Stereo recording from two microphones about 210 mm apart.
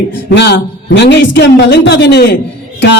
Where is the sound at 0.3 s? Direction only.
55° left (ahead or behind).